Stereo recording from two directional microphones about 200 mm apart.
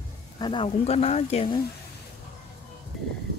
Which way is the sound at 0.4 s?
25° left (ahead or behind).